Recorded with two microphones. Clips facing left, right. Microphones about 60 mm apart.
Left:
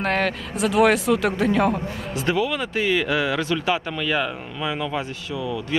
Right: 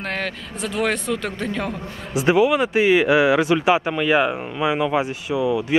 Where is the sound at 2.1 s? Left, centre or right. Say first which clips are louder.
Right 7 dB; centre.